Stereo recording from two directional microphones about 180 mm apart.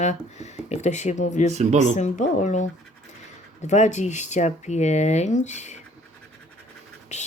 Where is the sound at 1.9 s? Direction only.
40° left (ahead or behind).